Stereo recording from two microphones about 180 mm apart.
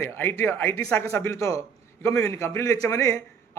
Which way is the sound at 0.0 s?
15° left (ahead or behind).